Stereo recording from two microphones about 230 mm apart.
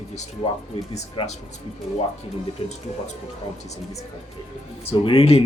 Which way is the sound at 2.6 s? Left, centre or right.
Left.